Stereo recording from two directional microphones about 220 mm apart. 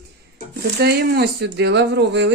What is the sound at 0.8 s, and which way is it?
Speech, 45° right (ahead or behind).